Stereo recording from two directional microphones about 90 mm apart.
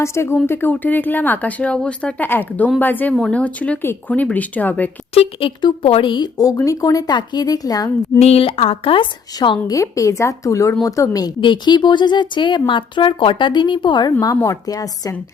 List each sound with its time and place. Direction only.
0.0 s speech: 30° left (ahead or behind)
5.1 s a woman's voice: 85° left; by 6.4 s 60° left (ahead or behind)
6.7 s a woman's voice: 40° left (ahead or behind)
8.4 s a woman's voice: 90° left; by 9.7 s 60° left (ahead or behind)
9.7 s speech: 35° left (ahead or behind)
11.3 s speech: 60° left (ahead or behind)
14.4 s speech: 40° left (ahead or behind)